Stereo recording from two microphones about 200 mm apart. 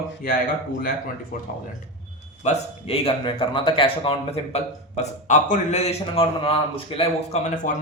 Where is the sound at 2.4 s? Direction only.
30° left (ahead or behind).